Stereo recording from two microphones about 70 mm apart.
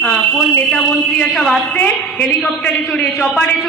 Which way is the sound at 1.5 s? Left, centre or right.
Centre.